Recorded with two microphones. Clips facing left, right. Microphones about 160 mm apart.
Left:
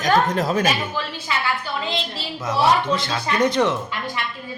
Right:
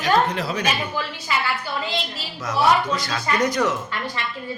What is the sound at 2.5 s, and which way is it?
Speech, 25° left (ahead or behind).